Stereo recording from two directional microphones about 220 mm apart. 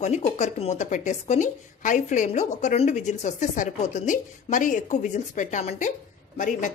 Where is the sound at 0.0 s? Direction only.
30° left (ahead or behind).